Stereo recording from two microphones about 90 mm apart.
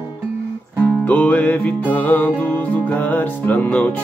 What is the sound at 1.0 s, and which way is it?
Music, 15° left (ahead or behind).